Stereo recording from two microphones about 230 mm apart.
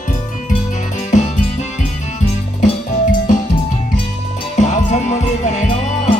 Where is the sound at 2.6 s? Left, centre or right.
Left.